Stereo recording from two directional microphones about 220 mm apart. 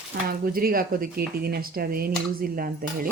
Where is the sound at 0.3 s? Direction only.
40° right (ahead or behind).